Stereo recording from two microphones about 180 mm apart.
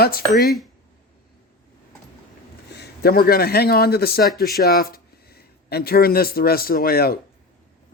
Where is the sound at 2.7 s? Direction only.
65° left (ahead or behind).